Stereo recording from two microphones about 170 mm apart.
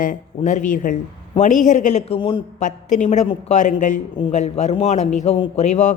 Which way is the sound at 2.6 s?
45° left (ahead or behind).